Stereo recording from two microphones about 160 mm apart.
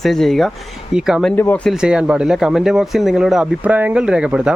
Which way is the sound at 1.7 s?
5° right (ahead or behind).